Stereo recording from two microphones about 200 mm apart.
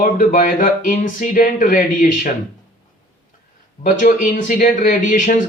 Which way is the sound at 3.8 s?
40° left (ahead or behind).